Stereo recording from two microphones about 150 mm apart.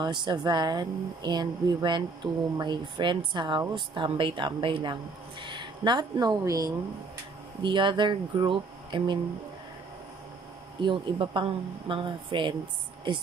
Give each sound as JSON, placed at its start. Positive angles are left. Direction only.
{"t": 0.0, "sound": "a woman's voice", "side_deg": -30}
{"t": 10.8, "sound": "a woman's voice", "side_deg": -35}